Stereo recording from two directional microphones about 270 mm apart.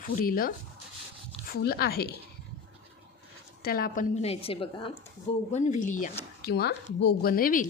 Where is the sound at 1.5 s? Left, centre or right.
Left.